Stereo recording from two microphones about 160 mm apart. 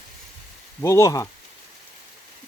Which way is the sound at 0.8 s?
20° left (ahead or behind).